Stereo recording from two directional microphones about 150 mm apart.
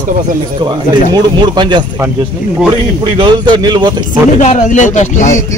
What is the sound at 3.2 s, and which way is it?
Speech, 30° right (ahead or behind).